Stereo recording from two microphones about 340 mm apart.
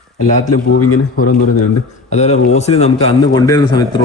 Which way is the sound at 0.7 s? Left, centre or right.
Left.